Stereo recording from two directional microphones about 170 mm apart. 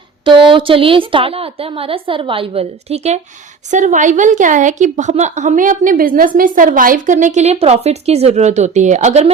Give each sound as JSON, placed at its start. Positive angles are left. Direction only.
{"t": 0.3, "sound": "a woman's voice", "side_deg": -30}